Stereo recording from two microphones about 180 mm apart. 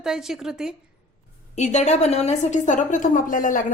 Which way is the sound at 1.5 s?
40° left (ahead or behind).